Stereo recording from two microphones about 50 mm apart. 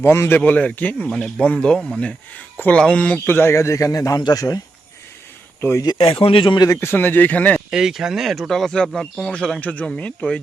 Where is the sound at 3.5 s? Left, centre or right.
Left.